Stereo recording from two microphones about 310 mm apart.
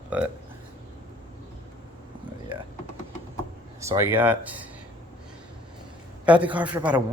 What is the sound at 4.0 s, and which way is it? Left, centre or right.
Speech, centre.